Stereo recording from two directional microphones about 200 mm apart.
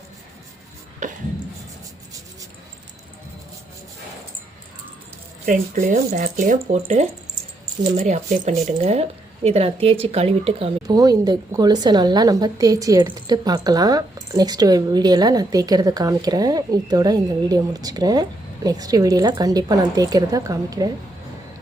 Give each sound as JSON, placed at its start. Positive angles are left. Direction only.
{"t": 1.0, "sound": "a sound", "side_deg": -40}
{"t": 5.5, "sound": "speech", "side_deg": -40}
{"t": 10.8, "sound": "a woman's voice", "side_deg": -20}